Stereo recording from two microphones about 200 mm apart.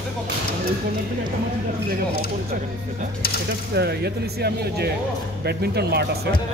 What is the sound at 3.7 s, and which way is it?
Speech, 55° right (ahead or behind).